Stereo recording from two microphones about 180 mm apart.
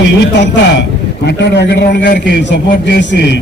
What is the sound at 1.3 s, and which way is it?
A man's voice, 70° left (ahead or behind).